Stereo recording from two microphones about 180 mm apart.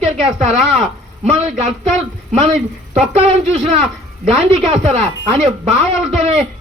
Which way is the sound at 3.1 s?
35° right (ahead or behind).